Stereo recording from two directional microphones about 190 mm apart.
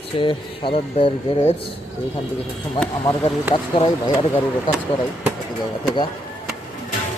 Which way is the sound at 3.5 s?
25° left (ahead or behind).